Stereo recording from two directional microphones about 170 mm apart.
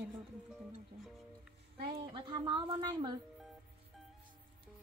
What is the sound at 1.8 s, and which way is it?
Speech, 30° right (ahead or behind).